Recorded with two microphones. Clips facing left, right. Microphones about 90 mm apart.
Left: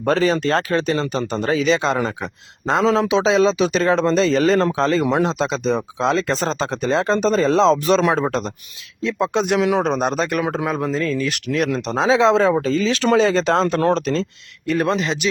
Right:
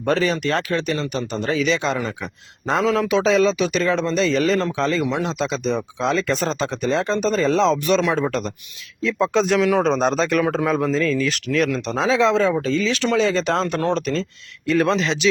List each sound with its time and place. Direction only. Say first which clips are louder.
0.0 s speech: left 2 dB; 35° left (ahead or behind)
9.0 s speech: right 1 dB; 20° left (ahead or behind)
12.5 s speech: left 2 dB; 40° left (ahead or behind)
14.8 s speech: right 1 dB; 10° left (ahead or behind)